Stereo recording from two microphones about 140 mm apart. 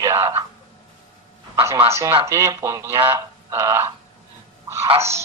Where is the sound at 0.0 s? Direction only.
20° right (ahead or behind).